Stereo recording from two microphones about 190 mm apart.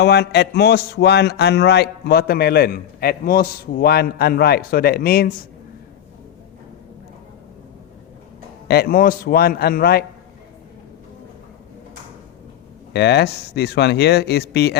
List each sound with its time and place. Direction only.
0.0 s a man's voice: 60° left (ahead or behind)
8.6 s a man's voice: 60° left (ahead or behind)
12.9 s a man's voice: 60° left (ahead or behind)